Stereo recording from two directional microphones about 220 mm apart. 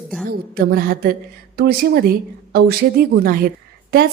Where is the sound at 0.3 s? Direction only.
40° right (ahead or behind).